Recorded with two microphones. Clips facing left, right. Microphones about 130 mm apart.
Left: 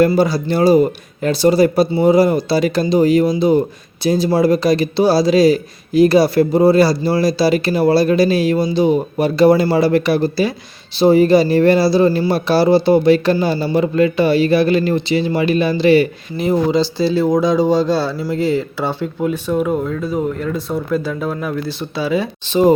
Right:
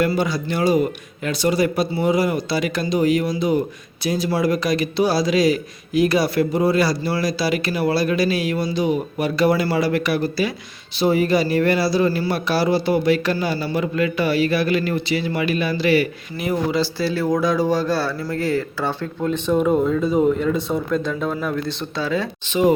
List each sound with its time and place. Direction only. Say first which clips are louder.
0.0 s speech: left 7 dB; 35° left (ahead or behind); by 22.3 s 10° left (ahead or behind)
22.4 s speech: left 5 dB; 35° left (ahead or behind)